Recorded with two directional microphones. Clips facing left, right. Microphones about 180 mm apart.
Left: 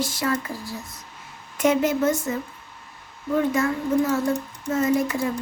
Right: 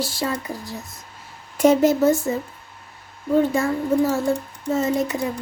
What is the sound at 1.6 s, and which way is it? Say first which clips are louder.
Speech: right 5 dB; 35° right (ahead or behind).